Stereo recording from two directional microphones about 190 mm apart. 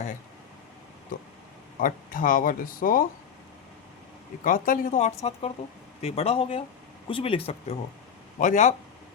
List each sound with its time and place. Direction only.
1.8 s speech: 45° left (ahead or behind)
4.4 s speech: 45° left (ahead or behind)
8.4 s speech: 40° left (ahead or behind)